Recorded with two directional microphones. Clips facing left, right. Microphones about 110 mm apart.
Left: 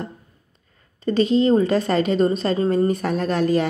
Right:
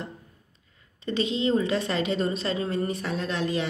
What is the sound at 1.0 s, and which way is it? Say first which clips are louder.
A woman's voice: left 8 dB; 45° left (ahead or behind).